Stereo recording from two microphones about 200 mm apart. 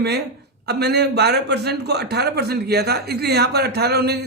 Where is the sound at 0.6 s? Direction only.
55° right (ahead or behind).